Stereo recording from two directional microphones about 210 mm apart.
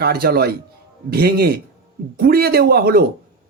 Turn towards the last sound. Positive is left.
turn(degrees=-45)  # may be behind; listen again after turning